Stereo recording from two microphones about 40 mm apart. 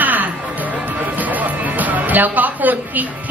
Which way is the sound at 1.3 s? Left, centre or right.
Right.